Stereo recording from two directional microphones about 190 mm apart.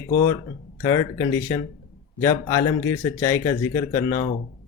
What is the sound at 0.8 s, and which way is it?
Speech, 20° left (ahead or behind).